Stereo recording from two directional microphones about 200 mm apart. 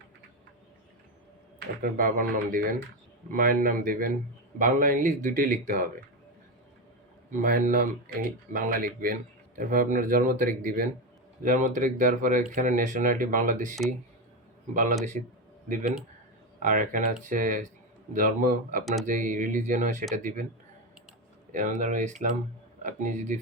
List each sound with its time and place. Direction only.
1.8 s speech: 45° right (ahead or behind)
7.3 s speech: 40° right (ahead or behind)
16.6 s speech: 40° right (ahead or behind)
21.5 s speech: 40° right (ahead or behind)